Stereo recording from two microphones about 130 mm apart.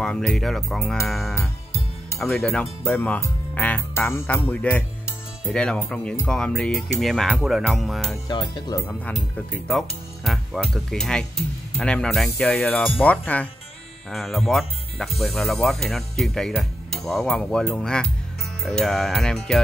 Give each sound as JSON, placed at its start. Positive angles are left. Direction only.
{"t": 0.0, "sound": "speech", "side_deg": 5}
{"t": 8.3, "sound": "speech", "side_deg": 35}
{"t": 9.1, "sound": "speech", "side_deg": 0}
{"t": 14.1, "sound": "speech", "side_deg": 0}